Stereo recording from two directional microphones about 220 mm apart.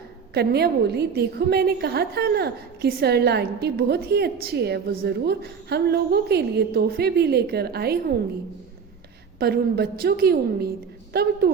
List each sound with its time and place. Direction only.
0.3 s a woman's voice: 45° right (ahead or behind)
9.4 s a woman's voice: 45° right (ahead or behind)